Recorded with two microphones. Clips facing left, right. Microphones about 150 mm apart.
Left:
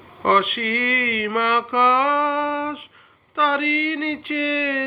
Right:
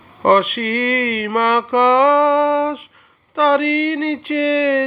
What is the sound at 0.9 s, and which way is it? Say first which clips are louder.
Mantra: right 5 dB; 20° right (ahead or behind).